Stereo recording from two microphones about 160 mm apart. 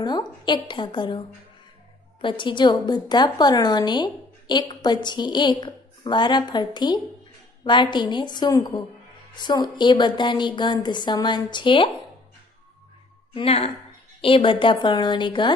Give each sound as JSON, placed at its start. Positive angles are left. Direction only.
{"t": 0.0, "sound": "a woman's voice", "side_deg": 25}
{"t": 2.2, "sound": "a woman's voice", "side_deg": 30}
{"t": 13.3, "sound": "a woman's voice", "side_deg": 35}